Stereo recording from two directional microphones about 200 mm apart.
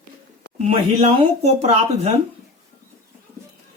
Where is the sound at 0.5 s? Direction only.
30° right (ahead or behind).